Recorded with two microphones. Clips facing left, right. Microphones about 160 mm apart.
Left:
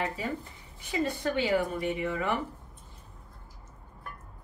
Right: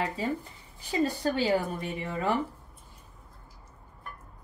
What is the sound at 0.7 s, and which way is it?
Speech, 35° right (ahead or behind).